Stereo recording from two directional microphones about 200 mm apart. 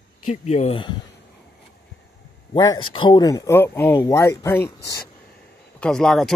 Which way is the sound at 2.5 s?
20° left (ahead or behind).